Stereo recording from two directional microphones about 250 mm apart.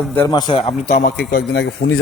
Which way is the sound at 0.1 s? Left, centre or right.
Centre.